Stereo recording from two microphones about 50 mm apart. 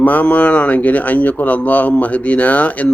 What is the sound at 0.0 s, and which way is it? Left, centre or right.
Speech, left.